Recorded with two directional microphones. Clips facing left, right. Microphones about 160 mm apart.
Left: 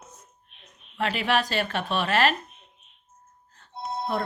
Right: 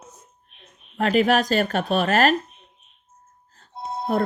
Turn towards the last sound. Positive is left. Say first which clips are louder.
# right 5 dB
turn(degrees=-40)  # may be behind; listen again after turning